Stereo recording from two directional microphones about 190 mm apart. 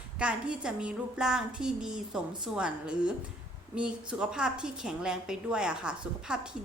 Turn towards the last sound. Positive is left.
turn(degrees=-5)  # may be behind; listen again after turning